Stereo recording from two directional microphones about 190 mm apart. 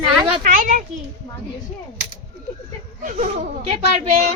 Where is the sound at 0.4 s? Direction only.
45° right (ahead or behind).